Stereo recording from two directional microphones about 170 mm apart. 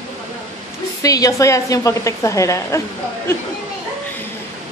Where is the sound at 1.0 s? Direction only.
20° left (ahead or behind).